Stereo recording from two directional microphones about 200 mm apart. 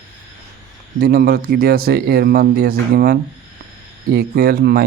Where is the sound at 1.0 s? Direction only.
50° right (ahead or behind).